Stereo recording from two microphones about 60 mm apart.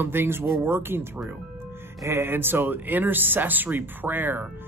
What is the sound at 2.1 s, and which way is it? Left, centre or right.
Speech, right.